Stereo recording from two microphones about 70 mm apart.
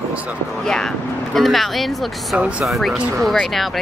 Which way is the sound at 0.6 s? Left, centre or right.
Centre.